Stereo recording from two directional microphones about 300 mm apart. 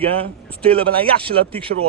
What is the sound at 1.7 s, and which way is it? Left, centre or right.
Speech, right.